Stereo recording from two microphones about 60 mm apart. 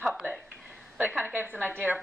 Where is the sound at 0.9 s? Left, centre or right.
Right.